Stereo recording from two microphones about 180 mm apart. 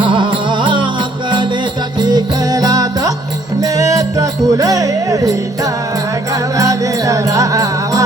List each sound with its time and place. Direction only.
0.0 s music: 25° right (ahead or behind)
2.0 s music: 25° right (ahead or behind)
6.6 s music: 20° right (ahead or behind)